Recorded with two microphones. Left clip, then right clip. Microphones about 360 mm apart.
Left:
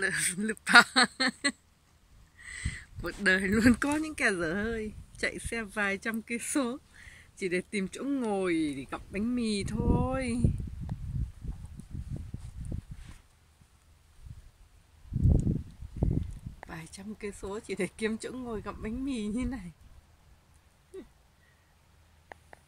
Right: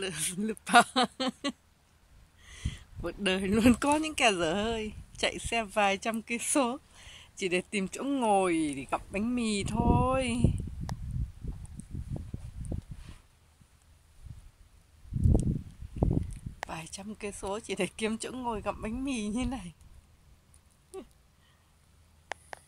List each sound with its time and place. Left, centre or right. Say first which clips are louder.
0.0 s speech: left 5 dB; centre
16.0 s a sound: right 3 dB; right
16.6 s speech: right 5 dB; centre